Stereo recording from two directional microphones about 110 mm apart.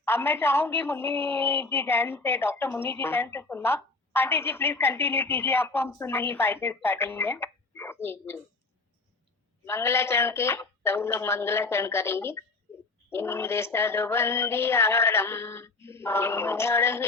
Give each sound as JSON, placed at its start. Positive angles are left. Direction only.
{"t": 0.0, "sound": "a woman's voice", "side_deg": 20}
{"t": 9.6, "sound": "a woman's voice", "side_deg": 25}